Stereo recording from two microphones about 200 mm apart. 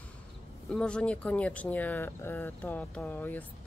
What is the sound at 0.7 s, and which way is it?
Speech, 5° left (ahead or behind).